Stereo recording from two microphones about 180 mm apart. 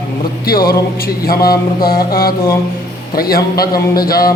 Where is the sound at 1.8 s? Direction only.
55° left (ahead or behind).